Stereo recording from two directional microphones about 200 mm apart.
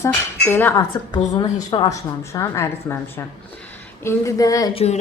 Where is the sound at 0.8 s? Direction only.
20° left (ahead or behind).